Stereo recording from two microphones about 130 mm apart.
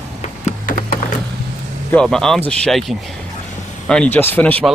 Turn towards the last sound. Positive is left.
turn(degrees=15)  # may be behind; listen again after turning